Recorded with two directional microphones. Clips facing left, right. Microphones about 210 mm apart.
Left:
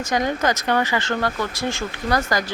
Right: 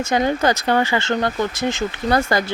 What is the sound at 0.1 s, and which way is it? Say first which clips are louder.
Speech: right 3 dB; 30° right (ahead or behind).